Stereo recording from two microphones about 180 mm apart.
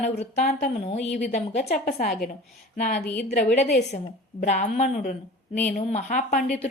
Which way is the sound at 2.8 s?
45° left (ahead or behind).